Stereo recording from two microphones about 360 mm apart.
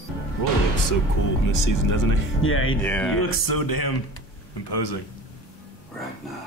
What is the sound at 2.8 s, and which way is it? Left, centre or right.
Speech, centre.